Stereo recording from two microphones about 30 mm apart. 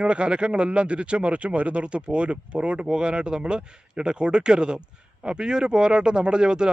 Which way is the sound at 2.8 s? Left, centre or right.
Right.